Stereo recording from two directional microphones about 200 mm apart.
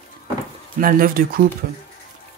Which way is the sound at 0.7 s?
45° right (ahead or behind).